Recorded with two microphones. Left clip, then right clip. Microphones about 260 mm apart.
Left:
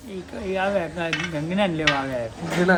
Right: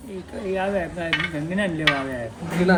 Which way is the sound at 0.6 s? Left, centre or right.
Centre.